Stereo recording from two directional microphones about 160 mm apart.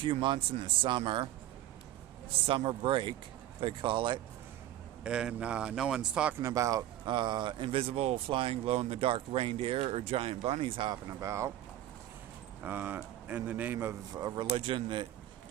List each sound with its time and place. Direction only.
0.0 s speech: 30° right (ahead or behind)
2.5 s speech: 35° right (ahead or behind)
5.0 s a man's voice: 5° right (ahead or behind)
6.4 s speech: 20° right (ahead or behind)
12.6 s a man's voice: 15° right (ahead or behind); by 15.0 s 30° right (ahead or behind)